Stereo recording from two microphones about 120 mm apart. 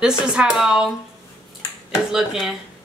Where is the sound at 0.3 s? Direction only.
5° right (ahead or behind).